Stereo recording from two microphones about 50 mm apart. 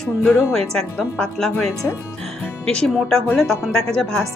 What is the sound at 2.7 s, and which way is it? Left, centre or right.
Speech, centre.